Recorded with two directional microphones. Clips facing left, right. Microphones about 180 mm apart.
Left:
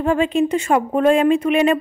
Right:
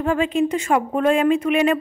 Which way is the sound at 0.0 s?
30° left (ahead or behind).